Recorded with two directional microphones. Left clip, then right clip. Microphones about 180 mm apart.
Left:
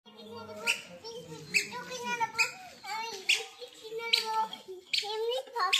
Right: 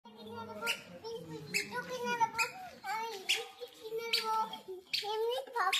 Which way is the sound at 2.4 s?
5° right (ahead or behind).